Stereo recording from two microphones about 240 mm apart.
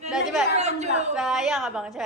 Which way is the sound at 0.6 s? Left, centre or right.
Right.